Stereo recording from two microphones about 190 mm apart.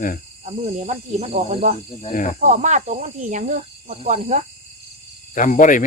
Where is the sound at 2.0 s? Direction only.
40° left (ahead or behind).